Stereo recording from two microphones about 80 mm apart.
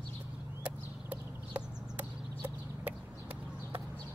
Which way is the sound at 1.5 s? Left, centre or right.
Right.